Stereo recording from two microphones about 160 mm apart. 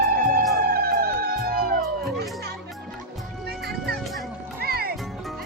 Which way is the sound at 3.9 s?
Centre (ahead or behind).